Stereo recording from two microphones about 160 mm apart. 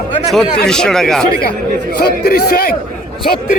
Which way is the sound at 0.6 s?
5° left (ahead or behind).